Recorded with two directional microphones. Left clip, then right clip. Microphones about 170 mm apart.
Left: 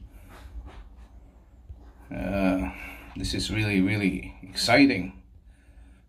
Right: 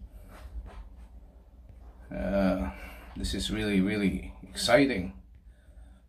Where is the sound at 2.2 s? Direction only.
15° left (ahead or behind).